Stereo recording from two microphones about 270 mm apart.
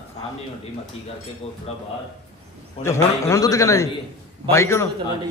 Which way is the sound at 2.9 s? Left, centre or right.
Centre.